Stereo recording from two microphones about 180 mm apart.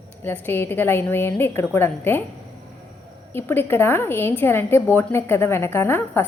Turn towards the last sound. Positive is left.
turn(degrees=10)  # may be behind; listen again after turning